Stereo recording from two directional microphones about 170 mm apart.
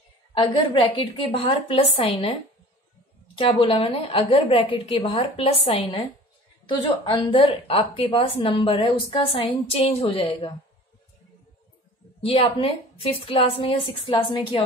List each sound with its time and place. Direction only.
0.3 s a woman's voice: 30° left (ahead or behind)
3.3 s a woman's voice: 30° left (ahead or behind)
12.3 s a woman's voice: 35° left (ahead or behind)